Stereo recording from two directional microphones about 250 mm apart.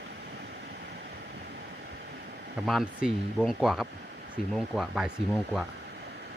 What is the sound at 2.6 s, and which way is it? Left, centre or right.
Speech, centre.